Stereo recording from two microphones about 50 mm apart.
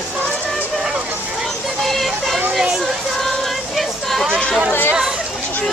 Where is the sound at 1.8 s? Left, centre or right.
Centre.